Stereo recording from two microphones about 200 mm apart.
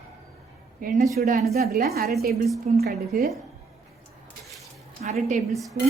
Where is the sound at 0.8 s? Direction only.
40° right (ahead or behind).